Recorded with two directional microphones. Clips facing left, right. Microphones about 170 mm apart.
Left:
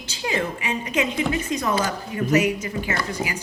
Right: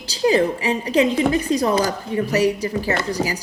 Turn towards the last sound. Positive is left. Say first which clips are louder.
# right 5 dB
turn(degrees=-35)  # may be behind; listen again after turning